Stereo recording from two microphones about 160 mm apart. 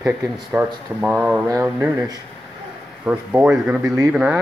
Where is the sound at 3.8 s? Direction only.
20° right (ahead or behind).